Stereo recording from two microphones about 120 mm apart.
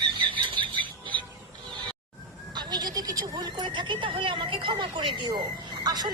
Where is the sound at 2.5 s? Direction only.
35° right (ahead or behind).